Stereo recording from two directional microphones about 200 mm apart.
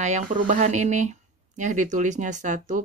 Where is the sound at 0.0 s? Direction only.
40° right (ahead or behind).